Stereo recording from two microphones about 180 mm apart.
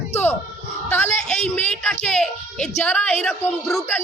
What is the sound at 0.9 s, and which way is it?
A man's voice, 10° left (ahead or behind).